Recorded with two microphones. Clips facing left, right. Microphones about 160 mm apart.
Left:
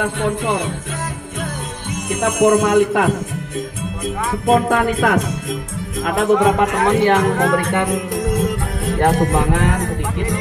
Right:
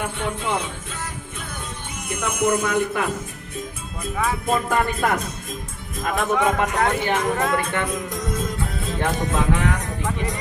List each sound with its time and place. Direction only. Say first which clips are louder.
0.0 s music: left 7 dB; 70° left (ahead or behind)
2.0 s music: left 8 dB; 90° left
6.0 s speech: left 6 dB; 90° left
8.2 s music: left 7 dB; 65° left (ahead or behind)